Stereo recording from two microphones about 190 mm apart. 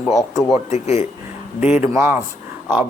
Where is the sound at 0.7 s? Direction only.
35° left (ahead or behind).